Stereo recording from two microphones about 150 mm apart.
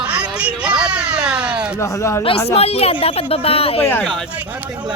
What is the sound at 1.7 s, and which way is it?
Speech, 20° left (ahead or behind).